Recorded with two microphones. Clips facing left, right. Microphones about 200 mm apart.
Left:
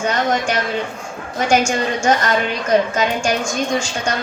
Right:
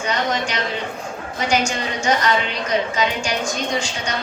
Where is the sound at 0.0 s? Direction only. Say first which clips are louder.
Left 4 dB; 50° left (ahead or behind).